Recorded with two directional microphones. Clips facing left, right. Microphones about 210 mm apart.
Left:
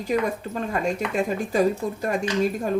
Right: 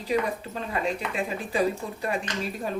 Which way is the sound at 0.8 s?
45° left (ahead or behind).